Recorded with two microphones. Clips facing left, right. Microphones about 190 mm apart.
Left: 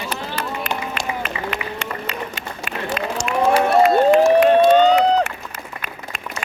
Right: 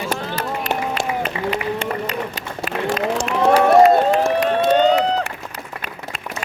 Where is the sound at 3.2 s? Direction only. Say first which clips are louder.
Right 2 dB; 35° right (ahead or behind).